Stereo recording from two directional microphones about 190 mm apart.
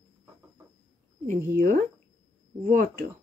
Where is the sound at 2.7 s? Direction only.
45° right (ahead or behind).